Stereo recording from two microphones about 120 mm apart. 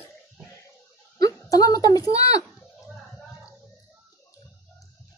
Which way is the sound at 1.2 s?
30° left (ahead or behind).